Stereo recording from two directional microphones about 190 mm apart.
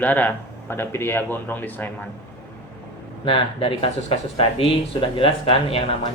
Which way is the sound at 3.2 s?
30° left (ahead or behind).